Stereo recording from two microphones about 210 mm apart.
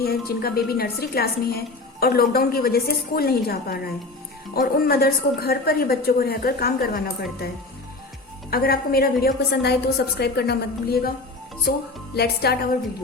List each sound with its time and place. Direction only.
0.3 s a woman's voice: 45° left (ahead or behind)
8.4 s a woman's voice: 45° left (ahead or behind)
12.1 s a woman's voice: 50° left (ahead or behind)